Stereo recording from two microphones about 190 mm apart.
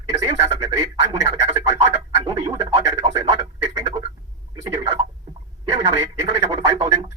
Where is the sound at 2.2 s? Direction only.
25° right (ahead or behind).